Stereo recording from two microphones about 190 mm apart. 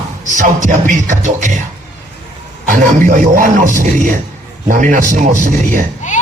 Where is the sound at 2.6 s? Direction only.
45° right (ahead or behind).